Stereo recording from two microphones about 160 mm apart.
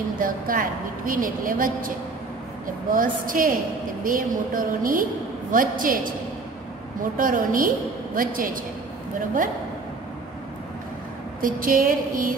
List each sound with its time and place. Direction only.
0.2 s a woman's voice: 60° right (ahead or behind)
2.9 s a woman's voice: 60° right (ahead or behind)
11.4 s a woman's voice: 60° right (ahead or behind)